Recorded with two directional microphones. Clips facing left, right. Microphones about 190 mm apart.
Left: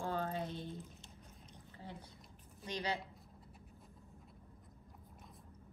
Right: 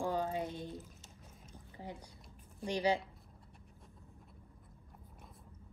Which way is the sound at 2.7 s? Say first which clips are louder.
Right 8 dB; 10° right (ahead or behind).